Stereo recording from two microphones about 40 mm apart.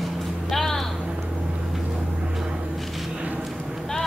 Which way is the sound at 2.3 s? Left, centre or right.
Centre.